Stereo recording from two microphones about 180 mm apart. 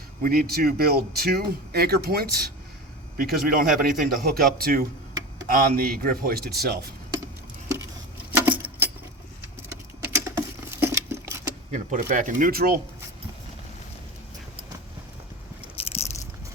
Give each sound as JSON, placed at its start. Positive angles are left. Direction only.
{"t": 0.2, "sound": "a man's voice", "side_deg": -55}
{"t": 8.3, "sound": "keys jangling", "side_deg": -10}
{"t": 10.0, "sound": "a sound", "side_deg": -15}
{"t": 11.7, "sound": "a man's voice", "side_deg": -45}
{"t": 15.8, "sound": "biting", "side_deg": 35}